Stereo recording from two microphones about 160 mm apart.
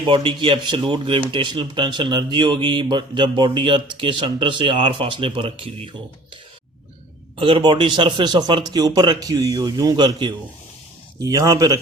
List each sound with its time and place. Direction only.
0.0 s speech: 35° right (ahead or behind)
7.3 s speech: 35° right (ahead or behind)